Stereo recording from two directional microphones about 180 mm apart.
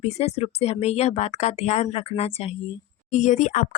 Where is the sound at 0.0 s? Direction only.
35° left (ahead or behind).